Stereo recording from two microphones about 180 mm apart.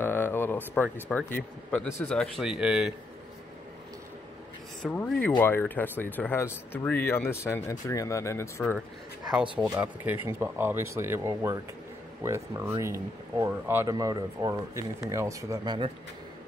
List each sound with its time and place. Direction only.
0.0 s a sound: 10° left (ahead or behind)
1.0 s speech: 10° left (ahead or behind)
4.8 s speech: 5° left (ahead or behind)
9.3 s speech: 5° right (ahead or behind); by 15.9 s 25° right (ahead or behind)